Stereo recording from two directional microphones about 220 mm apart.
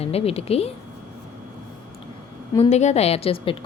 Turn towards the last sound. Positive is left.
turn(degrees=25)  # may be behind; listen again after turning